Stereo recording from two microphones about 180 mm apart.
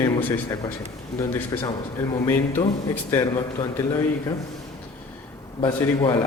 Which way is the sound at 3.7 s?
20° left (ahead or behind).